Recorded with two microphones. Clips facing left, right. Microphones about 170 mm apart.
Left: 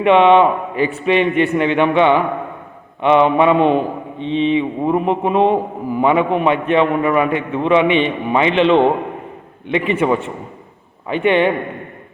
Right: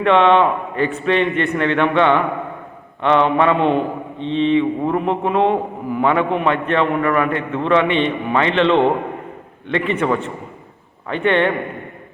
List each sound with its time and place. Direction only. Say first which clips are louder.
0.0 s a man's voice: left 3 dB; 15° left (ahead or behind)